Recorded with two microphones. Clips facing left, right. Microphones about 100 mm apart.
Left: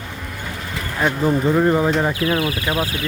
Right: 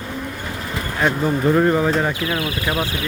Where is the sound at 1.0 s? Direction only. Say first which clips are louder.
Even; centre (ahead or behind).